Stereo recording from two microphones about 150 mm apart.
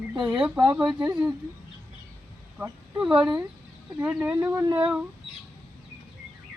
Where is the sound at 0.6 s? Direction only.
25° right (ahead or behind).